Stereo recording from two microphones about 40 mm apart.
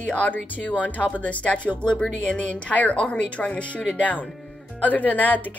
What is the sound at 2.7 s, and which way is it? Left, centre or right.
Speech, left.